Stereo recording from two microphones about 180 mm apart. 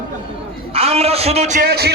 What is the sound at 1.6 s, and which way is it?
Speech, 60° right (ahead or behind).